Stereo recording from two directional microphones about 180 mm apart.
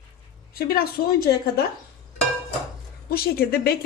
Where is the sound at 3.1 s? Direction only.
55° left (ahead or behind).